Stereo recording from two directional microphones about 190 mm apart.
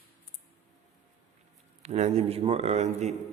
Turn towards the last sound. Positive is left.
turn(degrees=-35)  # may be behind; listen again after turning